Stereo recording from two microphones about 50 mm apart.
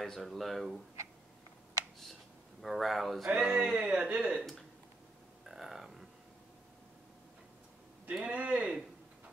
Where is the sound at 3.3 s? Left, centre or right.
Centre.